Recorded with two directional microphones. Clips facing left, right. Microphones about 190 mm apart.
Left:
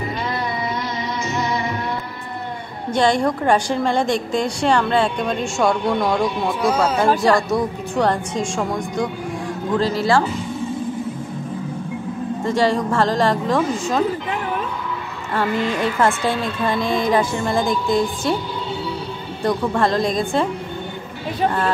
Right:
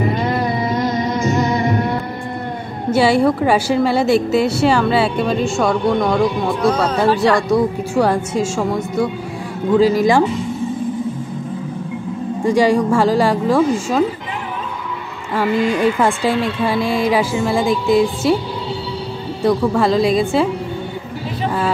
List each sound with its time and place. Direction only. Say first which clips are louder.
0.2 s music: right 6 dB; 45° right (ahead or behind)
2.9 s a woman's voice: right 4 dB; 5° right (ahead or behind)
12.4 s speech: right 5 dB; 10° right (ahead or behind)
15.3 s speech: right 4 dB; 10° right (ahead or behind)
19.4 s a woman's voice: right 4 dB; 5° right (ahead or behind)